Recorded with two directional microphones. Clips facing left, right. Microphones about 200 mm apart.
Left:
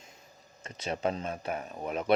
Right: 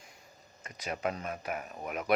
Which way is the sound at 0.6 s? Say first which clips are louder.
Left 3 dB; 30° left (ahead or behind).